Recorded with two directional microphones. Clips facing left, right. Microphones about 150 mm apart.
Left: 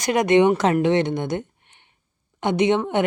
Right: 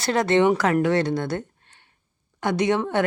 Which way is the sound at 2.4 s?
20° left (ahead or behind).